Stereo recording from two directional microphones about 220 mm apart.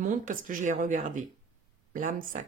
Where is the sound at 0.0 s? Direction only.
35° right (ahead or behind).